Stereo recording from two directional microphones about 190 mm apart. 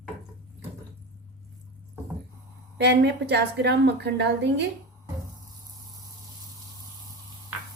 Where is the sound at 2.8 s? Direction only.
60° right (ahead or behind).